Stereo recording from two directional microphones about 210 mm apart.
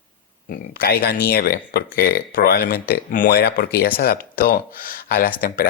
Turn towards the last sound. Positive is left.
turn(degrees=45)  # may be behind; listen again after turning